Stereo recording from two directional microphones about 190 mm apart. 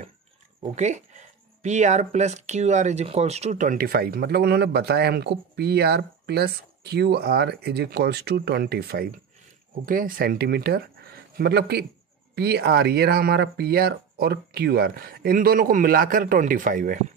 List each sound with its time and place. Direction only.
0.6 s speech: 35° right (ahead or behind)